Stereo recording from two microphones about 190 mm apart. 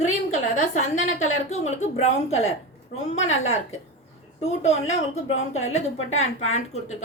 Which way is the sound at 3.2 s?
90° left.